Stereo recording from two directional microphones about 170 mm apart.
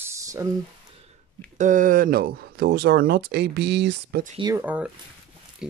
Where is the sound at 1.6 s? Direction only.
50° right (ahead or behind); by 4.2 s 90° right.